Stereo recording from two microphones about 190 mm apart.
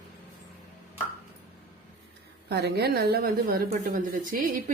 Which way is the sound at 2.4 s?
60° right (ahead or behind).